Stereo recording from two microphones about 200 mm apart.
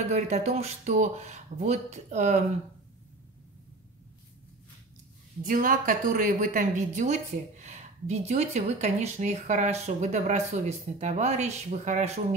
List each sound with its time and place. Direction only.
0.1 s a woman's voice: 35° right (ahead or behind)
5.4 s a woman's voice: 45° right (ahead or behind)